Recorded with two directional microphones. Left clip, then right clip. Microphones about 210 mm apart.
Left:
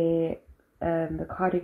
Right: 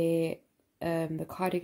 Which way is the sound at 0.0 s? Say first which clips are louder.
Left 3 dB; 30° right (ahead or behind).